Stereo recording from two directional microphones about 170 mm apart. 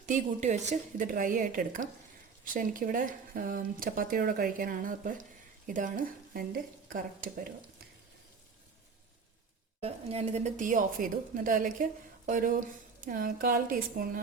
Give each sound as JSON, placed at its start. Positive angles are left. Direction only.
{"t": 0.0, "sound": "a woman's voice", "side_deg": -45}
{"t": 9.8, "sound": "a woman's voice", "side_deg": -35}